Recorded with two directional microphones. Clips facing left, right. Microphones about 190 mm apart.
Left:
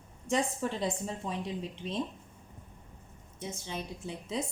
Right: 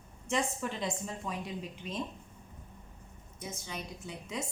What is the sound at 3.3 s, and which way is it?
A woman's voice, 30° left (ahead or behind).